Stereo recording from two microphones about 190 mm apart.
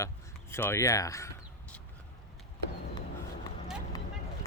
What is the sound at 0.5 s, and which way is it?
Speech, 15° left (ahead or behind).